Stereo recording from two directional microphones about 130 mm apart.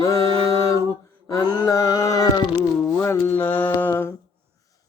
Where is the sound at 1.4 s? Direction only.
15° right (ahead or behind).